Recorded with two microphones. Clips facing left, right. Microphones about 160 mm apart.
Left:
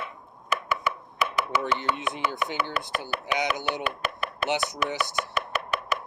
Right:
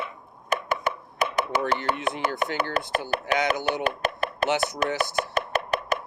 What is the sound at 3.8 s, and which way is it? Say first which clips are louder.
Chopping: right 5 dB; 40° right (ahead or behind).